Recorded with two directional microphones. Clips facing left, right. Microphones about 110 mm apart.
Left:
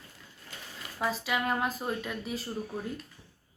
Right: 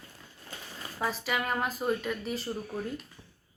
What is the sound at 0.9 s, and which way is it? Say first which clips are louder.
A woman's voice: left 1 dB; centre (ahead or behind).